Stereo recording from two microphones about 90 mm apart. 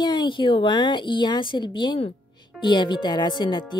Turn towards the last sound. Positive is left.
turn(degrees=55)  # may be behind; listen again after turning